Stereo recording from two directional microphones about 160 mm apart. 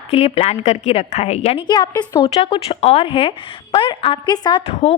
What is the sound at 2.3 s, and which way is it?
A woman's voice, 40° left (ahead or behind).